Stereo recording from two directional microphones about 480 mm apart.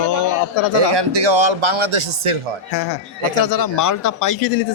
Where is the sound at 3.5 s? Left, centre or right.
Left.